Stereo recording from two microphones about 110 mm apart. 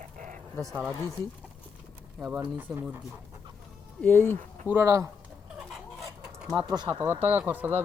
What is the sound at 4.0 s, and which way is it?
Speech, 15° left (ahead or behind).